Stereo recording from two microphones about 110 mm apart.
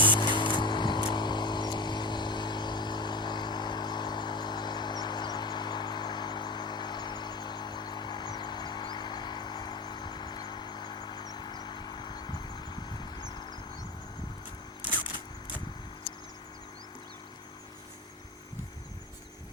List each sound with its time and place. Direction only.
0.2 s vehicle: 45° left (ahead or behind)